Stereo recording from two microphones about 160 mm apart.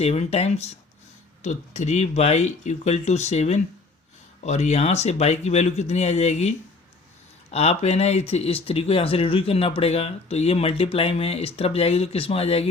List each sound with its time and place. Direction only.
0.0 s speech: 40° left (ahead or behind)
7.5 s speech: 40° left (ahead or behind)